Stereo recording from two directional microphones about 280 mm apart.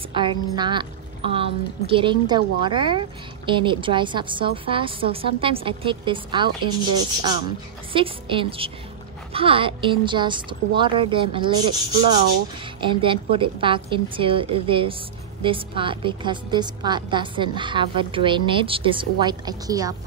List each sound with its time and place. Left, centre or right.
0.1 s a woman's voice: centre
12.8 s a woman's voice: centre